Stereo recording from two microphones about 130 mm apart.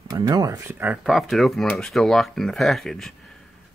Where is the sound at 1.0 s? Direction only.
Centre (ahead or behind).